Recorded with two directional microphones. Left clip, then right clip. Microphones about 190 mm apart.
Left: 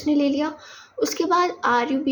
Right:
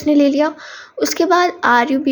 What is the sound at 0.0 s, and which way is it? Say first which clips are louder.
Speech: right 8 dB; 40° right (ahead or behind).